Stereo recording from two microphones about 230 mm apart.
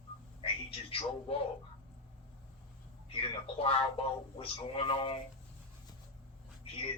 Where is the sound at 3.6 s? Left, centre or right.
Left.